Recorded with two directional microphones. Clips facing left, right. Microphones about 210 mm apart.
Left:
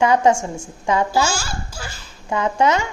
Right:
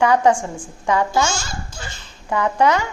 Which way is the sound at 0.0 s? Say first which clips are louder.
Even; 25° left (ahead or behind).